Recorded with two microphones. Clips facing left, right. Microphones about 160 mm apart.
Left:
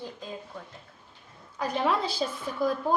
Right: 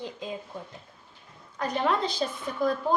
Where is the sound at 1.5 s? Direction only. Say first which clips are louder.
Even; 5° left (ahead or behind).